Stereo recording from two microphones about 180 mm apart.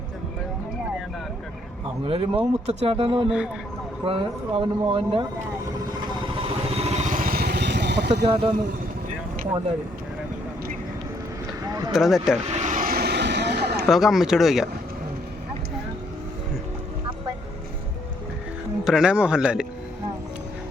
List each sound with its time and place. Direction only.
2.0 s speech: 30° right (ahead or behind)
3.2 s speech: 5° right (ahead or behind)
4.0 s speech: 30° right (ahead or behind)
6.1 s vehicle: 30° right (ahead or behind); by 8.1 s 70° right (ahead or behind)
8.1 s speech: 30° right (ahead or behind)
11.6 s vehicle: 20° right (ahead or behind)
11.9 s speech: centre (ahead or behind)
12.5 s vehicle: 40° right (ahead or behind); by 13.8 s 65° right (ahead or behind)
13.9 s speech: centre (ahead or behind)
18.9 s speech: 5° right (ahead or behind)